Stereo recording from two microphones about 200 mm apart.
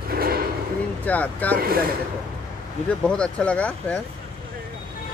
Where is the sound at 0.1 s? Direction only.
50° right (ahead or behind).